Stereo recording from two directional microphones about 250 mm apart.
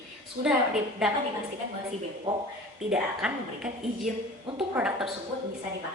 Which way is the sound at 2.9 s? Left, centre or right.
Centre.